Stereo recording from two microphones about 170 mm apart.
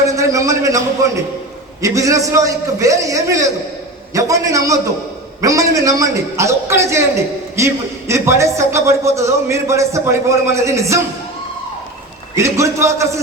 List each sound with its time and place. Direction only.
0.0 s a man's voice: 20° right (ahead or behind)
12.4 s a man's voice: 15° right (ahead or behind)